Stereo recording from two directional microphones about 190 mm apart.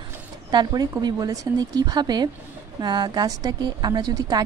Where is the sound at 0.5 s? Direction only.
20° right (ahead or behind).